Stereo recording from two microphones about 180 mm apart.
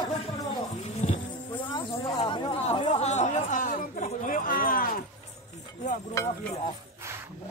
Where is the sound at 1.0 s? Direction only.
40° left (ahead or behind).